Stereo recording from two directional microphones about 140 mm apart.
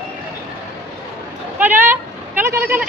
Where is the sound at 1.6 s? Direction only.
15° right (ahead or behind).